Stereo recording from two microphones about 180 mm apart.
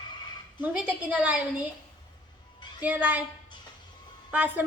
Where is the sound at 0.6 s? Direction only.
5° right (ahead or behind).